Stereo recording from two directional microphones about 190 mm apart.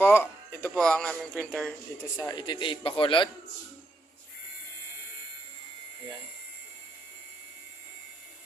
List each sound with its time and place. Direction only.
0.0 s music: 10° left (ahead or behind)
2.1 s a man's voice: 20° left (ahead or behind)